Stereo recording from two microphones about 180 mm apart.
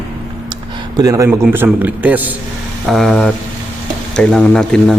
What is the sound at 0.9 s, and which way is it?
A man's voice, 20° right (ahead or behind).